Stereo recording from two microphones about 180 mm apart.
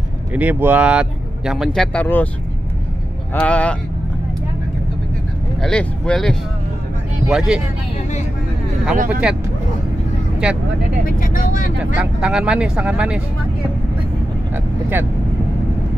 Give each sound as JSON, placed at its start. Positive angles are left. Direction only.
{"t": 0.3, "sound": "speech", "side_deg": -10}
{"t": 3.3, "sound": "speech", "side_deg": 10}
{"t": 5.6, "sound": "speech", "side_deg": 5}
{"t": 8.9, "sound": "speech", "side_deg": -45}
{"t": 11.1, "sound": "speech", "side_deg": 50}
{"t": 11.8, "sound": "speech", "side_deg": -5}